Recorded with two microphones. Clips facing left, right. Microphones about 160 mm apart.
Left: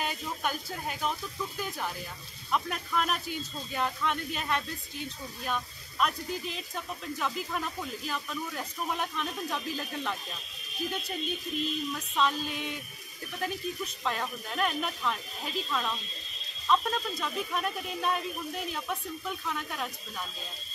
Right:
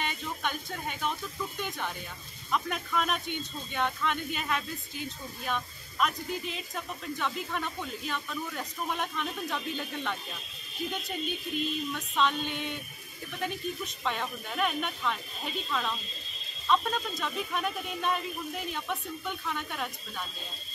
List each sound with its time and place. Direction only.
0.0 s speech: 5° left (ahead or behind)